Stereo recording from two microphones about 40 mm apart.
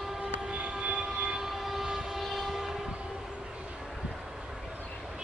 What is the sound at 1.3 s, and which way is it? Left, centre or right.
Train, centre.